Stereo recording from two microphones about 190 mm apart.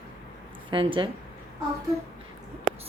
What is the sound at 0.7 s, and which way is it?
Speech, 25° right (ahead or behind).